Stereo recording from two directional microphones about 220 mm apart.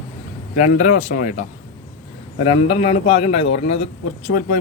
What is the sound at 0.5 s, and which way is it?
Speech, 35° left (ahead or behind).